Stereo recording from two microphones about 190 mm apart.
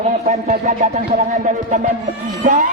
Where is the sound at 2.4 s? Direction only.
40° right (ahead or behind).